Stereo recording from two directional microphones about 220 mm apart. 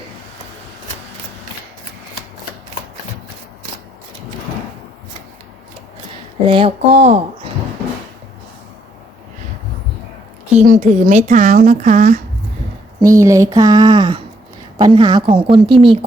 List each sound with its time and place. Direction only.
6.4 s speech: 25° right (ahead or behind)
10.5 s a woman's voice: 35° right (ahead or behind)
13.0 s speech: 15° right (ahead or behind)